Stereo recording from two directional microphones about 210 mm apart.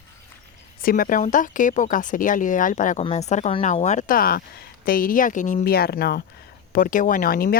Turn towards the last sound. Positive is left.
turn(degrees=45)  # may be behind; listen again after turning